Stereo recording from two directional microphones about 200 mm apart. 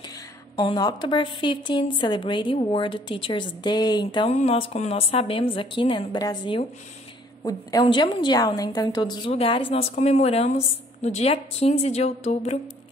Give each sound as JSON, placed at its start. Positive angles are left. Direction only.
{"t": 0.0, "sound": "a woman's voice", "side_deg": 20}